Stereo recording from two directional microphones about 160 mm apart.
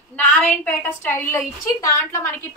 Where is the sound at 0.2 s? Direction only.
10° left (ahead or behind).